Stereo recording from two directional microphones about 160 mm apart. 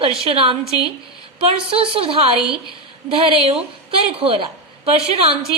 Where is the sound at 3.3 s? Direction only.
35° right (ahead or behind).